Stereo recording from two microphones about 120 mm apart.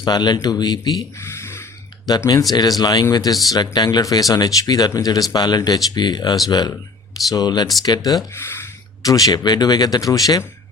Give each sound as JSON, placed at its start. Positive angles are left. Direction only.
{"t": 0.0, "sound": "speech", "side_deg": 35}
{"t": 1.2, "sound": "a sound", "side_deg": 20}
{"t": 2.0, "sound": "speech", "side_deg": 35}
{"t": 8.4, "sound": "speech", "side_deg": 20}